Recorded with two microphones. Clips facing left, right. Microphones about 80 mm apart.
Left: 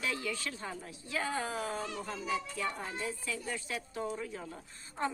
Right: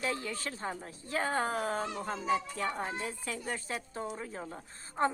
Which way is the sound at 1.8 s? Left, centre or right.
Right.